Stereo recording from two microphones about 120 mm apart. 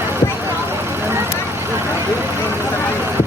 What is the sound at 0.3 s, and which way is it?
Vehicle, 20° right (ahead or behind).